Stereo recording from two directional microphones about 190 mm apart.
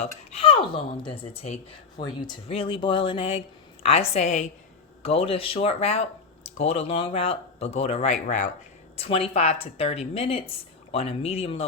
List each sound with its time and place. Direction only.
0.0 s speech: 30° left (ahead or behind)